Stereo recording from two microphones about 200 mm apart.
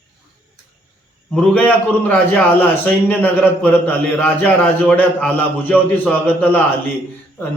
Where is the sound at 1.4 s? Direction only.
5° left (ahead or behind).